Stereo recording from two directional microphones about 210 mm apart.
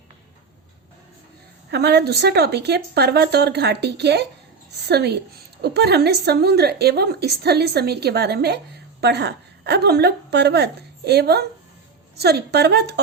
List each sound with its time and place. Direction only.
1.7 s a woman's voice: 50° right (ahead or behind)